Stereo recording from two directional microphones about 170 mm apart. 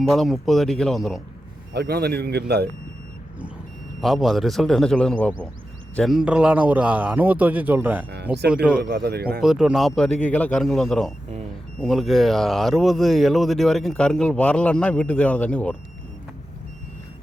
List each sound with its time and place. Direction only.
0.1 s speech: centre (ahead or behind)
1.7 s speech: 70° right (ahead or behind)
4.0 s a man's voice: centre (ahead or behind)
8.8 s a man's voice: 65° right (ahead or behind)
9.4 s speech: 5° right (ahead or behind)
10.1 s a man's voice: 50° left (ahead or behind)
10.3 s speech: 5° left (ahead or behind)